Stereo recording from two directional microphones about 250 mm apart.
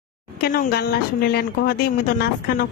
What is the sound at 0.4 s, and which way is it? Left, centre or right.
Speech, left.